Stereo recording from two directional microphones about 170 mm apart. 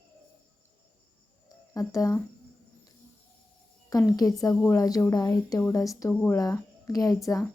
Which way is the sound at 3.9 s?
20° left (ahead or behind).